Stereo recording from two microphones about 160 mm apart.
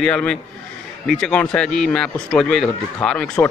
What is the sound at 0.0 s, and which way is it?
Speech, 5° left (ahead or behind).